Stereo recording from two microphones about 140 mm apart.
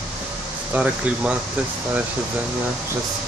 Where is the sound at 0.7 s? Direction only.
10° right (ahead or behind).